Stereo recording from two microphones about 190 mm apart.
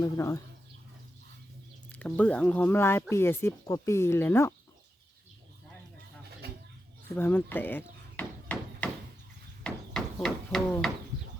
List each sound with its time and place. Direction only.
0.0 s speech: 15° left (ahead or behind)
1.9 s speech: 5° left (ahead or behind)
7.2 s hammer: 10° left (ahead or behind)
9.6 s a sound: 5° left (ahead or behind)